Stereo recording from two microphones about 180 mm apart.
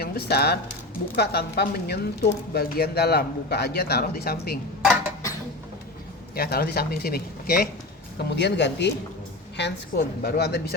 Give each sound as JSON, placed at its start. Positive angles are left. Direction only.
{"t": 0.0, "sound": "speech", "side_deg": 60}
{"t": 4.8, "sound": "a sound", "side_deg": -5}
{"t": 6.3, "sound": "speech", "side_deg": 60}
{"t": 8.2, "sound": "speech", "side_deg": 70}